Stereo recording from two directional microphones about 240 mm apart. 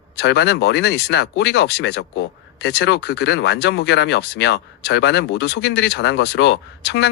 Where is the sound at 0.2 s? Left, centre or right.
Left.